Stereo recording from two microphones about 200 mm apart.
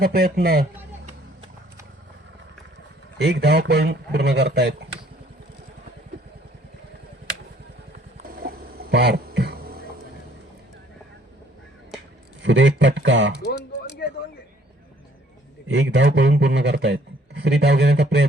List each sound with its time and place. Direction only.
0.0 s speech: 50° right (ahead or behind)
3.2 s a man's voice: 60° right (ahead or behind)
8.4 s a sound: 50° right (ahead or behind)
12.4 s a man's voice: 65° right (ahead or behind)
14.0 s a sound: 50° left (ahead or behind)
15.7 s a man's voice: 65° right (ahead or behind)